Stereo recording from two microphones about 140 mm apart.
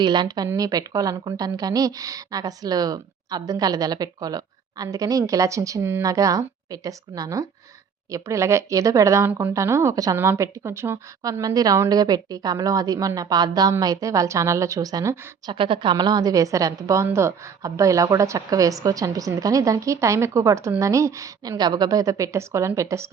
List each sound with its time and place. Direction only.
0.0 s a woman's voice: 30° right (ahead or behind)
15.4 s a woman's voice: 40° right (ahead or behind); by 23.0 s 20° right (ahead or behind)